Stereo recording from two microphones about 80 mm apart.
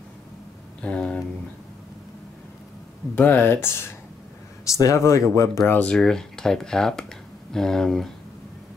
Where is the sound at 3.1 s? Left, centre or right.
Left.